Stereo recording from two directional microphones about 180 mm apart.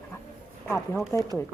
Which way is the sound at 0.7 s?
5° left (ahead or behind).